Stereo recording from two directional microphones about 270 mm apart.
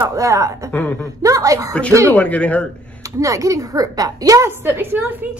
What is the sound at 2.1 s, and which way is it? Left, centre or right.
Speech, centre.